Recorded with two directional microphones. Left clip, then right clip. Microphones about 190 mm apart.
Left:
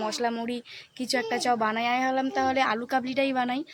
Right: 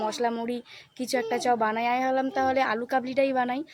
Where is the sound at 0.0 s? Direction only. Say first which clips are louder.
Right 1 dB; 5° right (ahead or behind).